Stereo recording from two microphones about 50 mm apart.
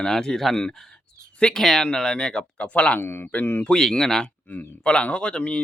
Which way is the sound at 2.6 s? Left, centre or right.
Left.